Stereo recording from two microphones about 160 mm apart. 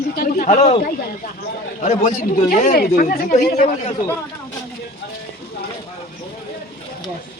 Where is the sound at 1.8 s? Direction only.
50° left (ahead or behind).